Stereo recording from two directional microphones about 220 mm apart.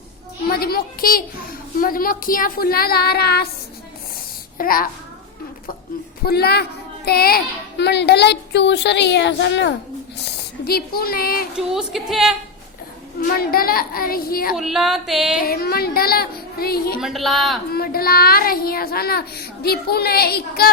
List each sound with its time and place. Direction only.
0.4 s a child's voice: 45° left (ahead or behind)
4.5 s a child's voice: 40° left (ahead or behind)
6.2 s a child's voice: 45° left (ahead or behind)
11.5 s a woman's voice: 5° right (ahead or behind)
13.2 s a child's voice: 45° left (ahead or behind)
14.5 s a woman's voice: centre (ahead or behind)
15.4 s a child's voice: 45° left (ahead or behind)
17.0 s a woman's voice: centre (ahead or behind)
17.7 s a child's voice: 45° left (ahead or behind)